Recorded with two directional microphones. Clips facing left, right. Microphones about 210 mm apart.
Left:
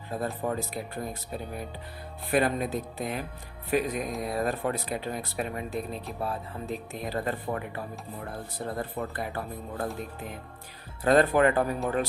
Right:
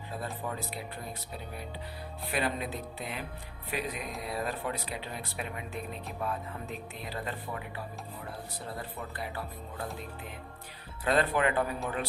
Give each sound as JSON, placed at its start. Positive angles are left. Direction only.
{"t": 0.1, "sound": "speech", "side_deg": 45}
{"t": 2.3, "sound": "speech", "side_deg": 45}
{"t": 8.6, "sound": "speech", "side_deg": 50}
{"t": 11.0, "sound": "speech", "side_deg": 45}